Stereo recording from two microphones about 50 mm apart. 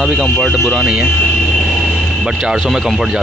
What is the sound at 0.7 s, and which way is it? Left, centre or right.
Speech, centre.